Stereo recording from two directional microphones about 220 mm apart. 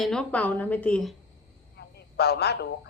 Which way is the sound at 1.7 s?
45° left (ahead or behind).